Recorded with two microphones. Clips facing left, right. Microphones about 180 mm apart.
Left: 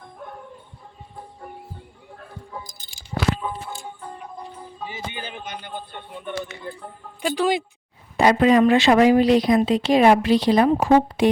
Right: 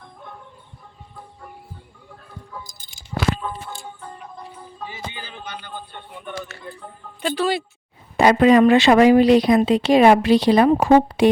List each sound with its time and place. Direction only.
3.4 s music: 10° left (ahead or behind)
7.2 s speech: 10° left (ahead or behind)
8.1 s speech: 70° right (ahead or behind)